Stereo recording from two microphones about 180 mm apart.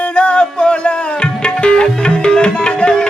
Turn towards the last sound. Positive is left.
turn(degrees=5)  # may be behind; listen again after turning